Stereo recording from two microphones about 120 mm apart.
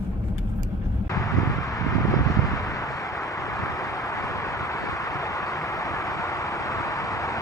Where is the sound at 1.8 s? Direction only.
30° left (ahead or behind).